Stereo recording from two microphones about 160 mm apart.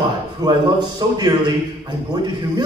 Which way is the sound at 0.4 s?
25° right (ahead or behind).